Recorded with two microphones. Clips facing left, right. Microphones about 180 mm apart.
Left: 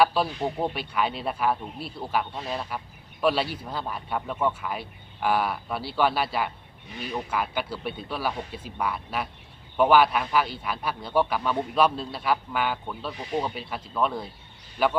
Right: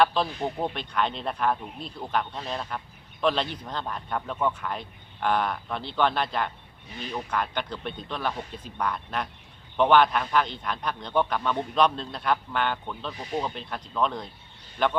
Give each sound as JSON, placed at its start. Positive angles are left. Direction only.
{"t": 0.0, "sound": "speech", "side_deg": 5}